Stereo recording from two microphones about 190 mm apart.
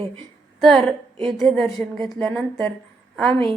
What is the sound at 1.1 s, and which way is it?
Speech, 25° right (ahead or behind).